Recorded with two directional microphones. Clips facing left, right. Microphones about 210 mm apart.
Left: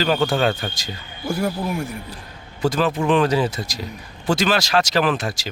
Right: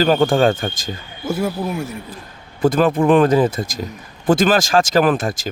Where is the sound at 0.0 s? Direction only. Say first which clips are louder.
Right 5 dB; 45° right (ahead or behind).